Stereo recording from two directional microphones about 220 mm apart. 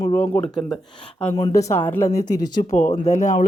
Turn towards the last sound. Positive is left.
turn(degrees=35)  # may be behind; listen again after turning